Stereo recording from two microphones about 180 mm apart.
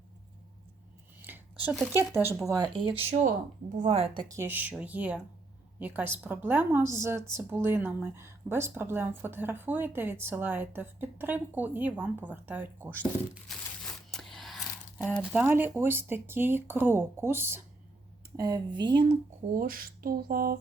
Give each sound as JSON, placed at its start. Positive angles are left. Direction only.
{"t": 1.2, "sound": "a sound", "side_deg": -10}
{"t": 1.9, "sound": "a woman's voice", "side_deg": -15}
{"t": 2.5, "sound": "a woman's voice", "side_deg": -25}
{"t": 13.5, "sound": "a sound", "side_deg": 0}
{"t": 14.1, "sound": "speech", "side_deg": 0}
{"t": 19.5, "sound": "speech", "side_deg": -50}